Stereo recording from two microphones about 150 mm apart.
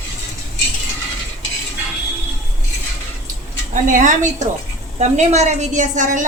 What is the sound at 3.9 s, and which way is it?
A woman's voice, 55° right (ahead or behind).